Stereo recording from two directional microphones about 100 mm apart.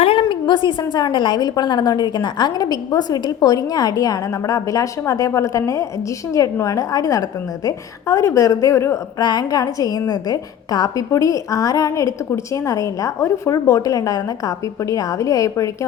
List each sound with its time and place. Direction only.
0.0 s a woman's voice: 65° left (ahead or behind); by 9.2 s 25° left (ahead or behind)
9.2 s a woman's voice: 40° left (ahead or behind)